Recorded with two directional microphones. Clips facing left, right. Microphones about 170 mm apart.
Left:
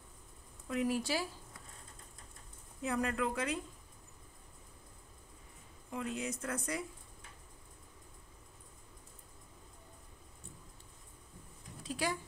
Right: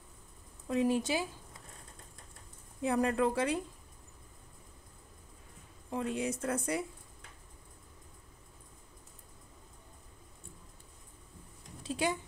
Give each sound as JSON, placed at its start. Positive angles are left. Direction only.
{"t": 0.7, "sound": "a woman's voice", "side_deg": -25}
{"t": 2.8, "sound": "a woman's voice", "side_deg": -30}
{"t": 5.9, "sound": "a woman's voice", "side_deg": -30}
{"t": 11.8, "sound": "a sound", "side_deg": -25}